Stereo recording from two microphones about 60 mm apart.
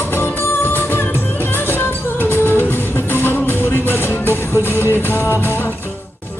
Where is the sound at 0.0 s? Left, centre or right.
Left.